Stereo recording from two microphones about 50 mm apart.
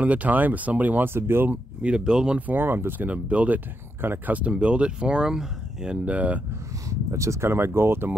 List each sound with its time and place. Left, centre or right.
0.0 s speech: right
1.0 s speech: right
1.5 s speech: right
2.3 s speech: right
3.1 s speech: right; by 5.9 s centre
6.0 s speech: right
6.9 s speech: right